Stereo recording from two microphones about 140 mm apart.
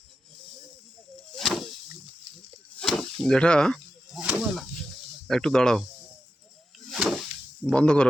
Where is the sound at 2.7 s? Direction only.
5° left (ahead or behind).